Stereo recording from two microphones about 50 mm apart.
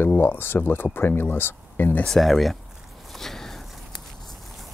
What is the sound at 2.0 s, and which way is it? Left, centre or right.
Speech, centre.